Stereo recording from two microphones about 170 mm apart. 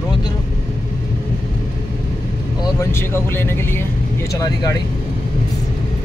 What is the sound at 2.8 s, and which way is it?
Speech, 15° left (ahead or behind).